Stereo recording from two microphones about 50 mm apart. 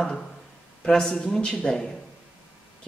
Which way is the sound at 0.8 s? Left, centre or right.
Centre.